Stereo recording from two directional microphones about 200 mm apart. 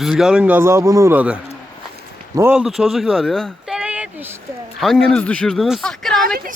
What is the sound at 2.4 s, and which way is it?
Speech, 5° right (ahead or behind).